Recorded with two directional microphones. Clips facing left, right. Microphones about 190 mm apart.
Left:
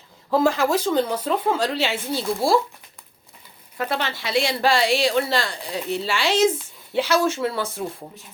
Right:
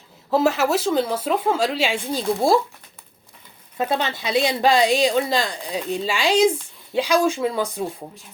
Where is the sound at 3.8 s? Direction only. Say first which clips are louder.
Right 3 dB; 20° right (ahead or behind).